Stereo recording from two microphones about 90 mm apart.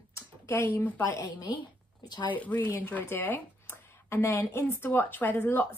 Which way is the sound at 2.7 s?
25° left (ahead or behind).